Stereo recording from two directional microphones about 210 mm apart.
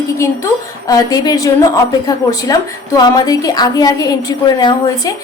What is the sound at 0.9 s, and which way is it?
A woman's voice, 20° left (ahead or behind).